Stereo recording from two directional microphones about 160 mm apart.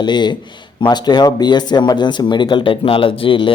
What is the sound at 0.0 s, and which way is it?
Speech, 30° left (ahead or behind).